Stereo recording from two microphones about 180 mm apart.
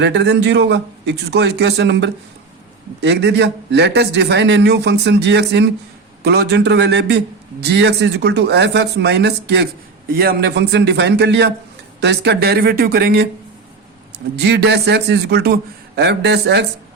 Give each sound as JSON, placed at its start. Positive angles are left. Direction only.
{"t": 0.0, "sound": "a man's voice", "side_deg": -70}
{"t": 14.3, "sound": "a man's voice", "side_deg": -70}